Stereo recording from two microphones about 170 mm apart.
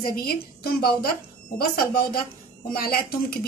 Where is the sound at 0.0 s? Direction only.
60° left (ahead or behind).